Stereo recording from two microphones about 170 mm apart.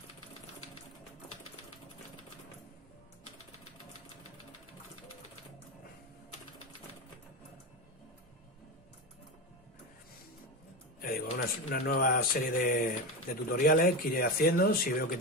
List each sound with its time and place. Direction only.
11.0 s speech: 60° left (ahead or behind)